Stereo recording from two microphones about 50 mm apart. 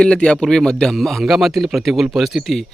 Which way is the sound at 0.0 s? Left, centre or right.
Centre.